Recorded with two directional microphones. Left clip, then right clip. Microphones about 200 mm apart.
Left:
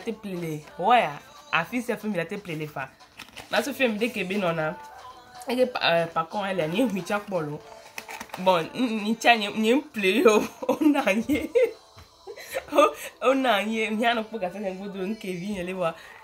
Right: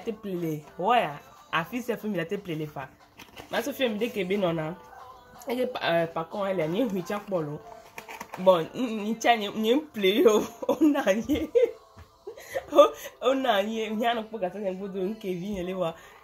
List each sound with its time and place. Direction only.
0.0 s speech: 5° left (ahead or behind)
12.6 s speech: 10° left (ahead or behind)